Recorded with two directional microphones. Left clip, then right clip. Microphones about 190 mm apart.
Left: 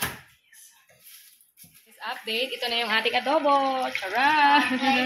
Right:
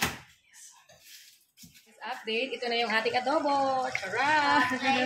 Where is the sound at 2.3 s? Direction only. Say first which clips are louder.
Left 3 dB; centre (ahead or behind).